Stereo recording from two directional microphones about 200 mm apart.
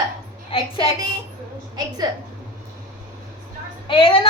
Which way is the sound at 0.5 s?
25° left (ahead or behind).